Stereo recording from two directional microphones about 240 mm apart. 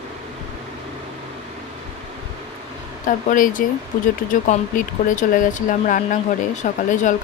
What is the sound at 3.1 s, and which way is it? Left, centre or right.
Speech, left.